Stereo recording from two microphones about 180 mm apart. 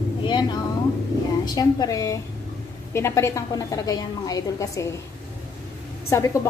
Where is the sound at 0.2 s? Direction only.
25° left (ahead or behind).